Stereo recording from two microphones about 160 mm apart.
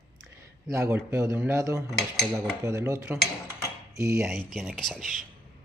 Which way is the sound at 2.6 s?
20° right (ahead or behind).